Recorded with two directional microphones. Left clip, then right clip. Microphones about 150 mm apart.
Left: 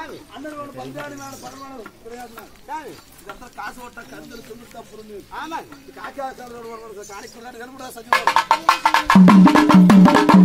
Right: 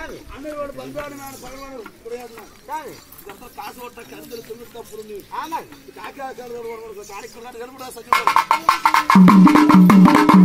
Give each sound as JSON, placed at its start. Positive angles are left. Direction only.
{"t": 8.1, "sound": "speech", "side_deg": -30}
{"t": 8.6, "sound": "music", "side_deg": -40}